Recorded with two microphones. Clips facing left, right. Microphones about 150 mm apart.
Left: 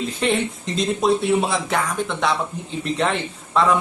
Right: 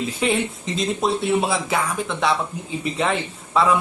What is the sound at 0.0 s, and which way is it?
A man's voice, centre (ahead or behind).